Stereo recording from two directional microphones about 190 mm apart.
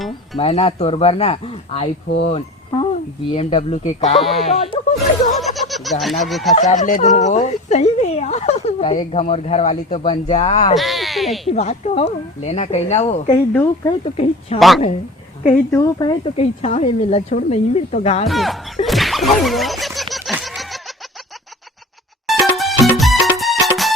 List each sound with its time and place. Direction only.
0.3 s speech: 35° left (ahead or behind)
2.2 s a sound: 30° left (ahead or behind)
3.2 s speech: 30° left (ahead or behind)
5.3 s speech: centre (ahead or behind)
6.6 s speech: 40° left (ahead or behind)
10.8 s speech: centre (ahead or behind)
11.5 s speech: 35° left (ahead or behind)
13.3 s speech: 10° left (ahead or behind)
14.0 s speech: 35° left (ahead or behind)
15.4 s speech: 15° left (ahead or behind); by 18.3 s 35° left (ahead or behind)
18.3 s speech: centre (ahead or behind)
18.9 s a sound: centre (ahead or behind)
22.3 s music: centre (ahead or behind)